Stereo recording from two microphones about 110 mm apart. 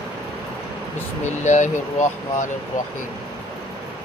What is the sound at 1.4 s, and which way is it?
Speech, 90° left.